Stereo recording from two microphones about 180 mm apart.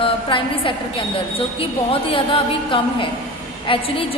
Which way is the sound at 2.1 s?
30° left (ahead or behind).